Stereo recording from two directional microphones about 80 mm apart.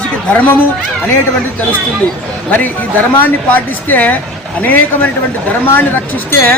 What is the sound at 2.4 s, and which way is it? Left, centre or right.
Speech, left.